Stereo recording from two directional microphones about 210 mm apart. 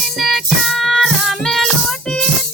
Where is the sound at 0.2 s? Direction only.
Centre (ahead or behind).